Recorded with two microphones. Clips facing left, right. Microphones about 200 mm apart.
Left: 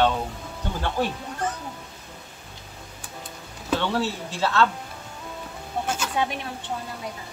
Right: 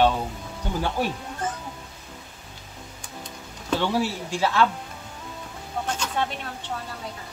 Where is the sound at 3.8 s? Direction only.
10° right (ahead or behind).